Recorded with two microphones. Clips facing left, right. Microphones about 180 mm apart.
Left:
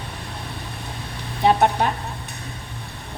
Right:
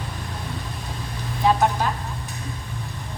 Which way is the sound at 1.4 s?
65° left (ahead or behind).